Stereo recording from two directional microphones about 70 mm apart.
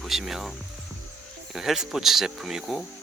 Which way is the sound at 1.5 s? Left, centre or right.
Centre.